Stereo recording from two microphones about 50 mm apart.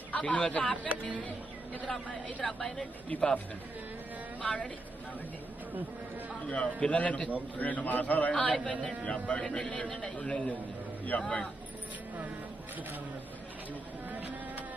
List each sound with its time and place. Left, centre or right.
0.1 s speech: left
4.4 s speech: left
6.4 s a man's voice: left
14.1 s a sound: right